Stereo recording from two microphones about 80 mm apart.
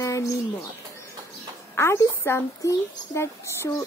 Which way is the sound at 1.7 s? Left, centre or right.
Left.